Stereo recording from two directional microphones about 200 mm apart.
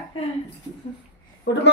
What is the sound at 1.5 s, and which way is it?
Speech, 60° left (ahead or behind).